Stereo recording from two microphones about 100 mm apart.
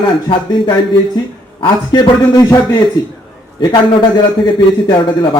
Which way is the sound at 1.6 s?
45° left (ahead or behind).